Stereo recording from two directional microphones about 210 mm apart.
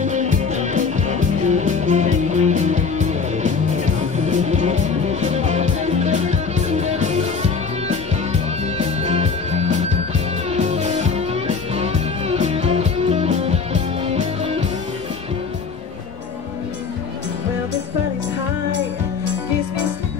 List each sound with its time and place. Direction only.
0.0 s music: 35° right (ahead or behind)